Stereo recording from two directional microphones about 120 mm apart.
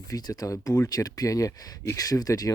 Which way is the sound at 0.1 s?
30° left (ahead or behind).